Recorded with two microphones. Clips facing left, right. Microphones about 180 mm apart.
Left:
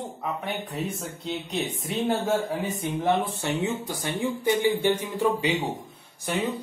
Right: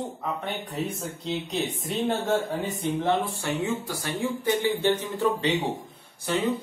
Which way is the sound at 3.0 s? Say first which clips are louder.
Left 3 dB; 20° left (ahead or behind).